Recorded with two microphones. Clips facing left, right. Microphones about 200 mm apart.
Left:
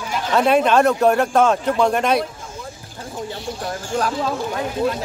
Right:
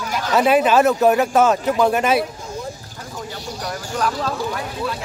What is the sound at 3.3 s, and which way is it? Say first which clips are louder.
Speech: left 1 dB; 40° right (ahead or behind).